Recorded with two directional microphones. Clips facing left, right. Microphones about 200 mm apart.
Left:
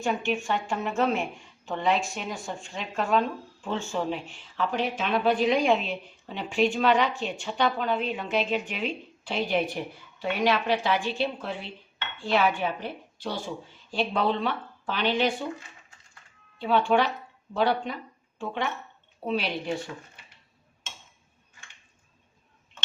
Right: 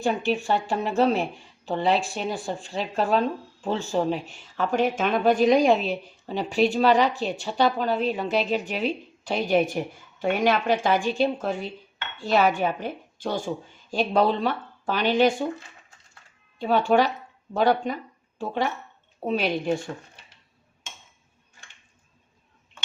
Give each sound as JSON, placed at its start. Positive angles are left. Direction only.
{"t": 0.0, "sound": "a woman's voice", "side_deg": -35}
{"t": 16.6, "sound": "a woman's voice", "side_deg": -40}